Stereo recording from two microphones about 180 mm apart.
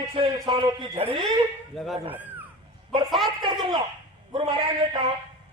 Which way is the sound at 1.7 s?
Centre (ahead or behind).